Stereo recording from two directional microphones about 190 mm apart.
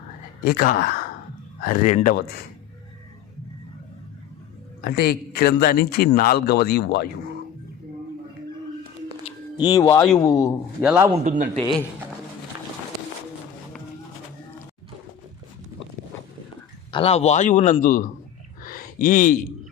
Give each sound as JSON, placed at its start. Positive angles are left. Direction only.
{"t": 0.4, "sound": "a man's voice", "side_deg": 50}
{"t": 2.1, "sound": "speech", "side_deg": 55}
{"t": 4.8, "sound": "speech", "side_deg": 55}
{"t": 9.2, "sound": "speech", "side_deg": 25}
{"t": 10.8, "sound": "a man's voice", "side_deg": -10}
{"t": 11.2, "sound": "a man's voice", "side_deg": -40}
{"t": 16.9, "sound": "a man's voice", "side_deg": 30}
{"t": 18.6, "sound": "a sound", "side_deg": 45}